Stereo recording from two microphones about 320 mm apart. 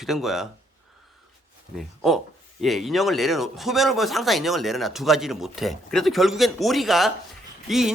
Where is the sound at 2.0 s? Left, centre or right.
Centre.